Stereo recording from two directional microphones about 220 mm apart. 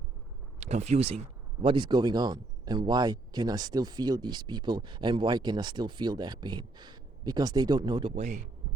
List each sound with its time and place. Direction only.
0.6 s speech: 30° right (ahead or behind)